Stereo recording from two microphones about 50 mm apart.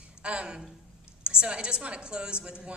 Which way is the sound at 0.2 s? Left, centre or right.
Right.